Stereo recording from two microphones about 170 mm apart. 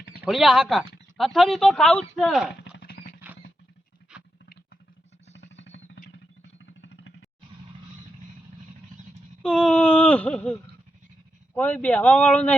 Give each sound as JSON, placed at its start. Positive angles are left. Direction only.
{"t": 0.2, "sound": "speech", "side_deg": 0}
{"t": 2.7, "sound": "a sound", "side_deg": 70}
{"t": 4.1, "sound": "patter", "side_deg": -5}
{"t": 5.3, "sound": "music", "side_deg": 90}
{"t": 9.4, "sound": "a sound", "side_deg": 5}
{"t": 11.5, "sound": "speech", "side_deg": 10}